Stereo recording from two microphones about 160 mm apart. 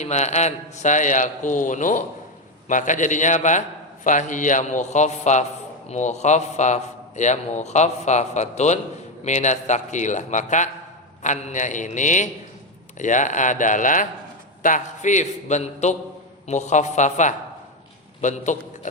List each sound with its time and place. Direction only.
0.0 s a man's voice: 45° left (ahead or behind)